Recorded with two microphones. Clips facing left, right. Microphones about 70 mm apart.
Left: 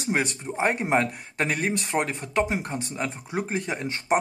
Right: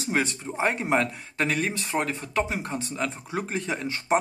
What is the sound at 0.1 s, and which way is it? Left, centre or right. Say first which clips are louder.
Speech: left 1 dB; left.